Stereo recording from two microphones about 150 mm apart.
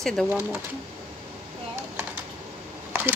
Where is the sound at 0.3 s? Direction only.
10° right (ahead or behind).